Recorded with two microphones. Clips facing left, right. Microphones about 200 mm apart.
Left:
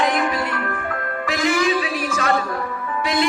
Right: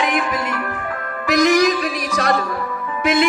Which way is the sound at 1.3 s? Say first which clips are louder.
Right 5 dB; 40° right (ahead or behind).